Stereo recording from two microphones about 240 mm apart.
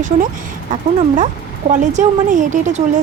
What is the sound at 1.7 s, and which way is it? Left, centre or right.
Speech, right.